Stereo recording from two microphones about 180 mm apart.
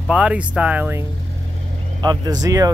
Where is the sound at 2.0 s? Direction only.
25° right (ahead or behind).